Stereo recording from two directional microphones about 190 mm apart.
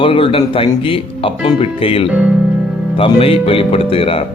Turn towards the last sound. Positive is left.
turn(degrees=30)  # may be behind; listen again after turning